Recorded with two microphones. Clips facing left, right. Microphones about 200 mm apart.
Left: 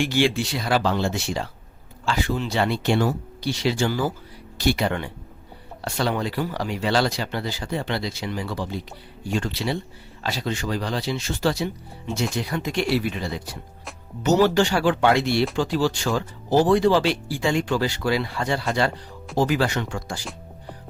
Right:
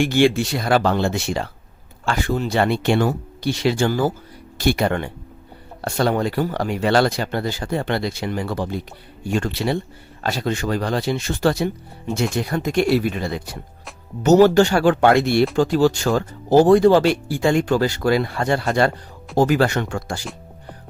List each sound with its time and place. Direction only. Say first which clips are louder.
0.0 s speech: right 5 dB; 50° right (ahead or behind)